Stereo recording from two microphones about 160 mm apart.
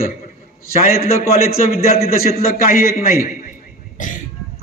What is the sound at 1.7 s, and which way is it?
A man's voice, 70° left (ahead or behind).